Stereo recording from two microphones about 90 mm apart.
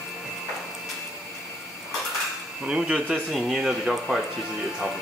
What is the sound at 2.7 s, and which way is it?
Speech, 10° right (ahead or behind).